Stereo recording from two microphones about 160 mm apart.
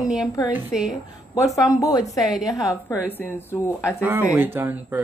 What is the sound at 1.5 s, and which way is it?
Speech, 20° left (ahead or behind).